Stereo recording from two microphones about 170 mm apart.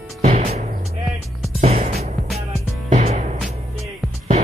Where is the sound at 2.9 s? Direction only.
40° right (ahead or behind).